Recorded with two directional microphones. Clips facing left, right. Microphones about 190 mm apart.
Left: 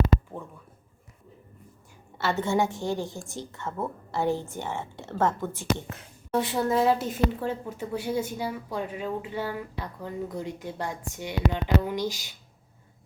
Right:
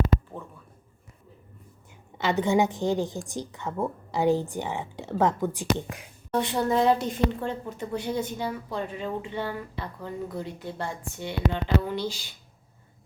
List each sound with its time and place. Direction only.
2.1 s a woman's voice: 15° right (ahead or behind)
6.3 s a woman's voice: 5° left (ahead or behind)